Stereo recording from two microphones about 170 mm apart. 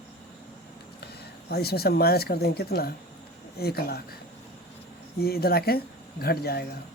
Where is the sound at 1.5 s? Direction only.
65° left (ahead or behind).